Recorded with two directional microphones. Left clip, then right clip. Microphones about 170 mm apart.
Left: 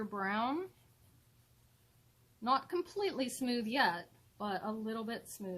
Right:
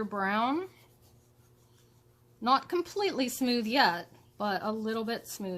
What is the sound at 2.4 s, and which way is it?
Speech, 20° right (ahead or behind).